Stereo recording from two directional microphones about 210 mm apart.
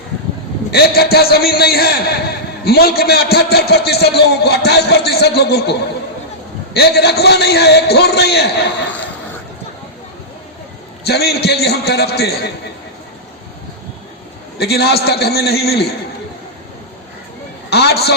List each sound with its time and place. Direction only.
0.7 s a man's voice: 50° left (ahead or behind)
6.7 s a man's voice: 50° left (ahead or behind)
11.0 s a man's voice: 50° left (ahead or behind)
14.6 s a man's voice: 50° left (ahead or behind)
17.7 s a man's voice: 50° left (ahead or behind)